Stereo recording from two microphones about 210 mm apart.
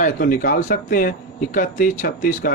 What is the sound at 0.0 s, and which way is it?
A man's voice, 40° left (ahead or behind).